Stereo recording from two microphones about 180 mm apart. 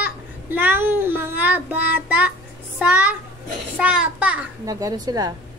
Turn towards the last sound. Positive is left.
turn(degrees=-20)  # may be behind; listen again after turning